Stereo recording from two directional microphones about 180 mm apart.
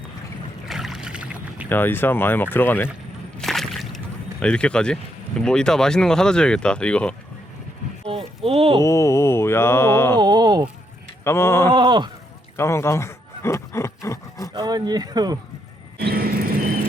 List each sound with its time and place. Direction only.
0.7 s rowboat: centre (ahead or behind)
1.7 s mantra: 10° left (ahead or behind)
3.3 s speech: centre (ahead or behind)
8.4 s speech: 30° right (ahead or behind)
8.8 s mantra: 15° left (ahead or behind)
10.2 s speech: 25° right (ahead or behind)
11.2 s mantra: 15° left (ahead or behind)
11.7 s speech: 25° right (ahead or behind)
12.5 s roaring cats: 15° left (ahead or behind)
14.5 s speech: 20° right (ahead or behind)
16.0 s music: 60° right (ahead or behind)